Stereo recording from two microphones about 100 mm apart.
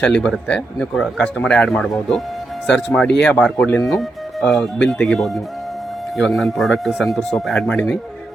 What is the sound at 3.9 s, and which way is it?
Music, centre (ahead or behind).